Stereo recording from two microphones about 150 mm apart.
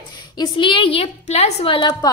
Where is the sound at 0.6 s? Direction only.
35° left (ahead or behind).